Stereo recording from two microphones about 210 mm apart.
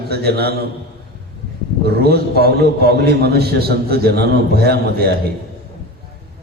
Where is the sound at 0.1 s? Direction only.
50° right (ahead or behind).